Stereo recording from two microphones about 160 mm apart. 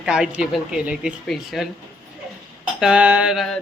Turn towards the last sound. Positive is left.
turn(degrees=0)  # may be behind; listen again after turning